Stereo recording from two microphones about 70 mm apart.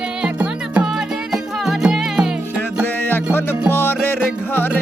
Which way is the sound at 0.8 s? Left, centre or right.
Centre.